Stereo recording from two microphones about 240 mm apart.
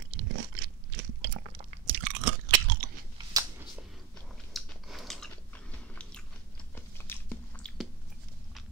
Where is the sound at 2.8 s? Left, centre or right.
Right.